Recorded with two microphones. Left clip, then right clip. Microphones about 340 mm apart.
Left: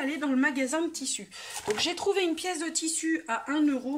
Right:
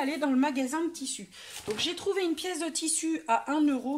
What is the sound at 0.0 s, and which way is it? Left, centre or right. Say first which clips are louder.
Speech: even; centre.